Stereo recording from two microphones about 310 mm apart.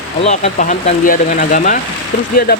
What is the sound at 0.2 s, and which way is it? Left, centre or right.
Speech, left.